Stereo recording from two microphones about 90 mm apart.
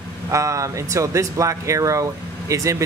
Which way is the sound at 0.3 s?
35° right (ahead or behind).